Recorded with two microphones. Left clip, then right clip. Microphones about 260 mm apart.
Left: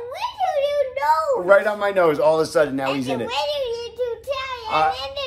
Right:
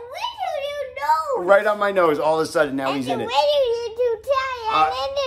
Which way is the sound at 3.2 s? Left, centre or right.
Right.